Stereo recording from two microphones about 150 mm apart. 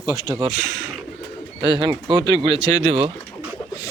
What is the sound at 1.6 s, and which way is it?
Speech, 35° right (ahead or behind).